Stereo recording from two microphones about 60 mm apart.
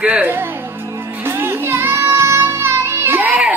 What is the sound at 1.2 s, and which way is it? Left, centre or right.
Music, right.